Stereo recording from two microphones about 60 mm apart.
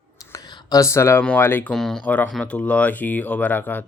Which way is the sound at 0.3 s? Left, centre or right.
Left.